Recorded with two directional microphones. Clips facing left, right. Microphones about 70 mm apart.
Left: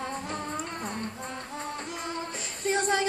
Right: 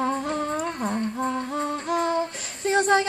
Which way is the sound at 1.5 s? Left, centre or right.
Right.